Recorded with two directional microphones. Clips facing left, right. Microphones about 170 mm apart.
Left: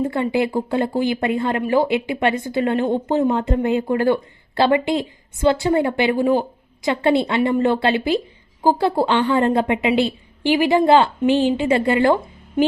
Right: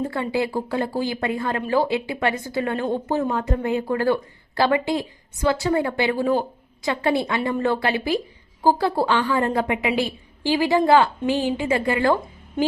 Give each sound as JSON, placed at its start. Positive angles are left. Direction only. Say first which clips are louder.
{"t": 0.1, "sound": "a woman's voice", "louder": "left 4 dB", "side_deg": 20}